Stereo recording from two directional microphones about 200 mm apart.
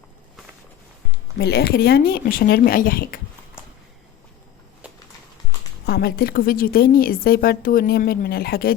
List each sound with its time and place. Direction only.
1.4 s a woman's voice: 50° left (ahead or behind)
5.8 s a woman's voice: 50° left (ahead or behind)